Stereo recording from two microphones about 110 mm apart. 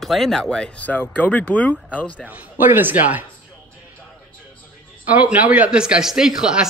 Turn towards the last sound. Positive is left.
turn(degrees=-5)  # may be behind; listen again after turning